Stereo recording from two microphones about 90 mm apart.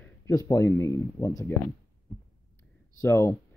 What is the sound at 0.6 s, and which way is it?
Speech, 30° left (ahead or behind).